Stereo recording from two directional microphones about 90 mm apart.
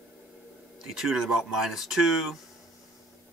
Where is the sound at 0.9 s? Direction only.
5° right (ahead or behind).